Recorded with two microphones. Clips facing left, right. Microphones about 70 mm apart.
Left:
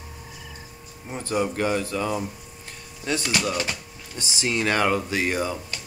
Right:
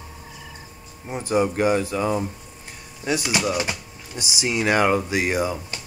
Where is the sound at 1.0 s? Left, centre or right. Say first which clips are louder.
Right 4 dB; centre.